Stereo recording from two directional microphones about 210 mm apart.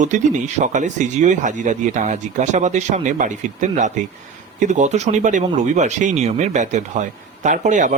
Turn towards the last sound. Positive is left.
turn(degrees=-35)  # may be behind; listen again after turning